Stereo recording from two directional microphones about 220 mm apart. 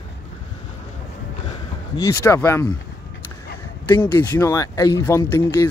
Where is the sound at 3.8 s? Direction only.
15° left (ahead or behind).